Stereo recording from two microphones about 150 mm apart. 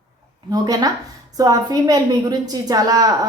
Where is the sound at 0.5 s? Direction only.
25° right (ahead or behind).